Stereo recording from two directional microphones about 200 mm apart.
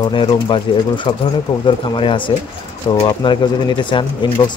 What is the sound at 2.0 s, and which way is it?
Speech, 25° left (ahead or behind).